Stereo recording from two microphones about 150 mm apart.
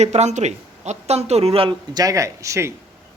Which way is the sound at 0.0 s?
50° right (ahead or behind).